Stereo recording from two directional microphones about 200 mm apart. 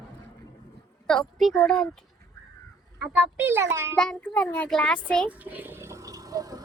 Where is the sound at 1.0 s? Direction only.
5° left (ahead or behind).